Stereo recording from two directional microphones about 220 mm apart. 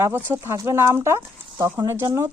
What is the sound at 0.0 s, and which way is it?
Speech, 10° right (ahead or behind).